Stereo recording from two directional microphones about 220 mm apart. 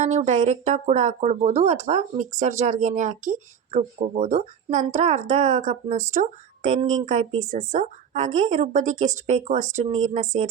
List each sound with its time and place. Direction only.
0.0 s speech: 30° right (ahead or behind)